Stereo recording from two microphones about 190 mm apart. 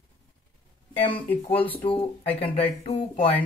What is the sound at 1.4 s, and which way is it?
A man's voice, 30° left (ahead or behind).